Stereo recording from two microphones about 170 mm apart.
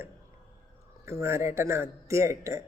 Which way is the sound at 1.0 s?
15° right (ahead or behind).